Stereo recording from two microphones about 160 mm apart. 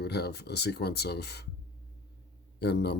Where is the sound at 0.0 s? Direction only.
90° left.